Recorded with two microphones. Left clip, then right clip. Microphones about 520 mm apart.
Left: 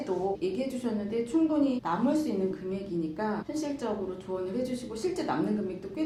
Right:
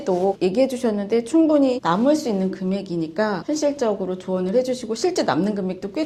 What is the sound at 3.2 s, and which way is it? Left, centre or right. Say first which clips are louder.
A woman's voice: right 16 dB; right.